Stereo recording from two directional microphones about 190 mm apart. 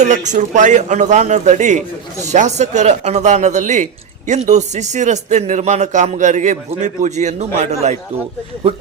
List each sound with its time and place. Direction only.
0.0 s a man's voice: 40° right (ahead or behind)